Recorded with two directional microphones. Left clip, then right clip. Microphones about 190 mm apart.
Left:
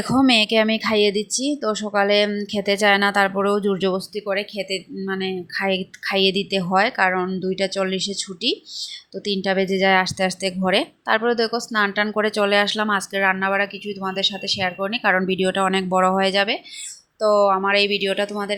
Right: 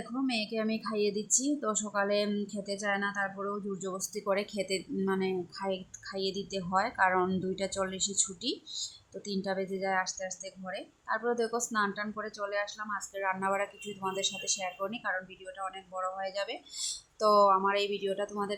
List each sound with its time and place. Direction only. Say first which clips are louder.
0.1 s speech: left 17 dB; 35° left (ahead or behind)
3.9 s speech: left 8 dB; 10° left (ahead or behind)
5.6 s speech: left 13 dB; 20° left (ahead or behind)
12.1 s speech: left 16 dB; 30° left (ahead or behind)
15.1 s speech: left 18 dB; 40° left (ahead or behind)
17.2 s speech: left 7 dB; 10° left (ahead or behind)